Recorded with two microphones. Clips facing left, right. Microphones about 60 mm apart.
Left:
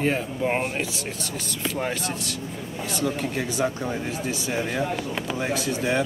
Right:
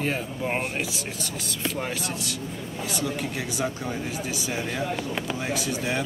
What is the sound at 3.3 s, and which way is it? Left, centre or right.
Speech, left.